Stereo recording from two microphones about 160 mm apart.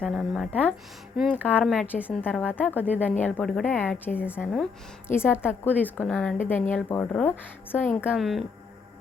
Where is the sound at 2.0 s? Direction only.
10° left (ahead or behind).